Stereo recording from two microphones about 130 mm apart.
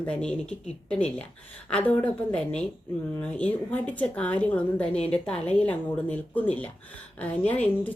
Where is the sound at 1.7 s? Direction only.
10° left (ahead or behind).